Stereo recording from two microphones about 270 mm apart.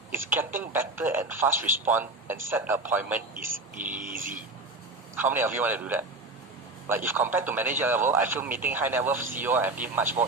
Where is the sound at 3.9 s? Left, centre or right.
Right.